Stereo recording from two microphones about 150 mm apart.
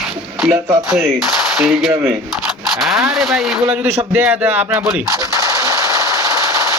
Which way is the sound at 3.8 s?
10° right (ahead or behind).